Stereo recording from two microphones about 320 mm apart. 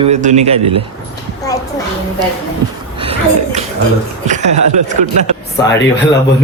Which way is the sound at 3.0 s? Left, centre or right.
Centre.